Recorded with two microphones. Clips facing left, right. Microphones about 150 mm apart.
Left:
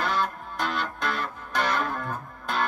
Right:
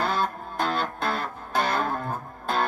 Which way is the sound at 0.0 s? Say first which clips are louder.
Right 1 dB; 40° right (ahead or behind).